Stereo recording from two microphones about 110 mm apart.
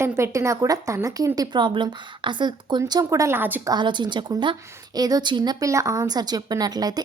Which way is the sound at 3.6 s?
40° right (ahead or behind).